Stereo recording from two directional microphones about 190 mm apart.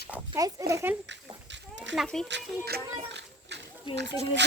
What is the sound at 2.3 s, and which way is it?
Speech, 60° right (ahead or behind).